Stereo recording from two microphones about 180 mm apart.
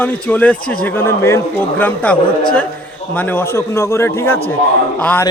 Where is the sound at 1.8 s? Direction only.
10° left (ahead or behind).